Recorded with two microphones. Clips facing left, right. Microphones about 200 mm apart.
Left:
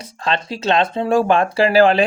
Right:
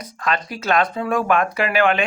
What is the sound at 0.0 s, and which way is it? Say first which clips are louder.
Speech: left 2 dB; 25° left (ahead or behind).